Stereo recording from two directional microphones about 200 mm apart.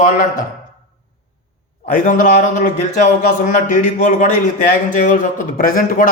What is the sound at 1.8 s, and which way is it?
A man's voice, 45° left (ahead or behind).